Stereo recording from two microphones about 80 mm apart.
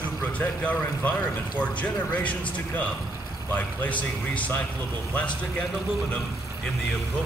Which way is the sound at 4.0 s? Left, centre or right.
Centre.